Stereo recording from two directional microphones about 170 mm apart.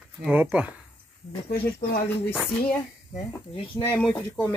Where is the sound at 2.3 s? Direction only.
Centre (ahead or behind).